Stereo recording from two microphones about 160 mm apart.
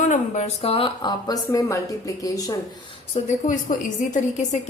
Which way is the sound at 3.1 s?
50° left (ahead or behind).